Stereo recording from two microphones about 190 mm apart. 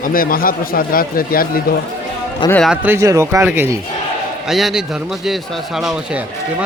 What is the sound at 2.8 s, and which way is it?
Speech, 15° right (ahead or behind).